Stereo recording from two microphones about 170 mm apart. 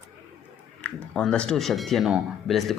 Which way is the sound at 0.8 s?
5° left (ahead or behind).